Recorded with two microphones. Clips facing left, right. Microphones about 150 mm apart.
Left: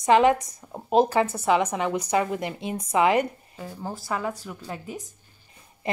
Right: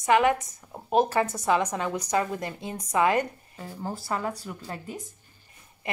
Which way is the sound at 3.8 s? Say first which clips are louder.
Left 1 dB; centre (ahead or behind).